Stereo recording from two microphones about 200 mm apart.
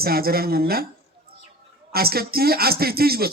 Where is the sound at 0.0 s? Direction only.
50° right (ahead or behind).